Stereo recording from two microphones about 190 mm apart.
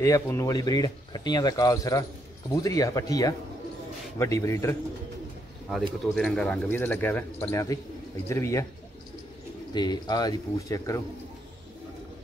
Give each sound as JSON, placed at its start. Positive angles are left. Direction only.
{"t": 0.0, "sound": "speech", "side_deg": 15}
{"t": 6.1, "sound": "speech", "side_deg": 5}
{"t": 9.8, "sound": "speech", "side_deg": 20}